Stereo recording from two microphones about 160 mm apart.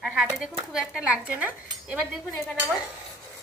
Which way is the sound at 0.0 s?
Centre (ahead or behind).